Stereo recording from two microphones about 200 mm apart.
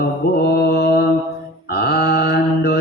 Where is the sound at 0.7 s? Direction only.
55° left (ahead or behind).